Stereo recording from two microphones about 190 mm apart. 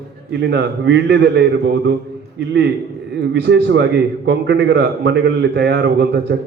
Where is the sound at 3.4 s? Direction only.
65° right (ahead or behind).